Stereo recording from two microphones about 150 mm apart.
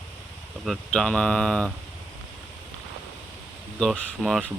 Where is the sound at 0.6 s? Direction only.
5° left (ahead or behind).